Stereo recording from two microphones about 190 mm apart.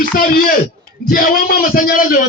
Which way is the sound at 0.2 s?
50° left (ahead or behind).